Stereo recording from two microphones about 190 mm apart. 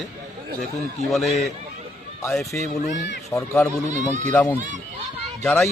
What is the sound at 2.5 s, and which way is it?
A man's voice, 10° left (ahead or behind).